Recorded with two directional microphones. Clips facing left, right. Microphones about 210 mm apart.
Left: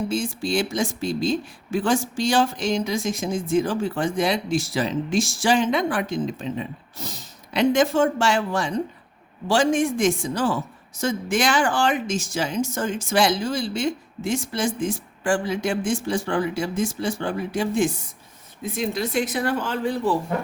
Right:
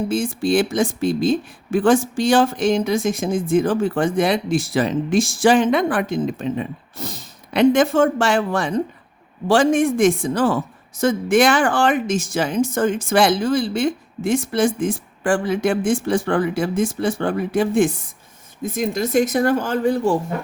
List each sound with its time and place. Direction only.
0.1 s speech: 55° right (ahead or behind)
18.6 s speech: 45° right (ahead or behind)